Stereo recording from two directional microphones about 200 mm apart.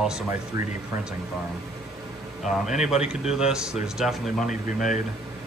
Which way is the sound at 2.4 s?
Centre (ahead or behind).